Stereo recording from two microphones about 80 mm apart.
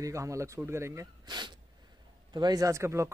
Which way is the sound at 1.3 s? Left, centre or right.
Right.